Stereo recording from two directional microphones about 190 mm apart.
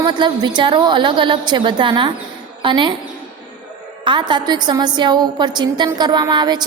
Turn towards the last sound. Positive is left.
turn(degrees=-20)  # may be behind; listen again after turning